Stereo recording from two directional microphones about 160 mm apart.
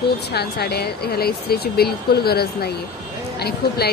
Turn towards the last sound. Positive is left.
turn(degrees=90)